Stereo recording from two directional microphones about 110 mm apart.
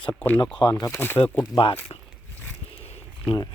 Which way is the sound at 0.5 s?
40° left (ahead or behind).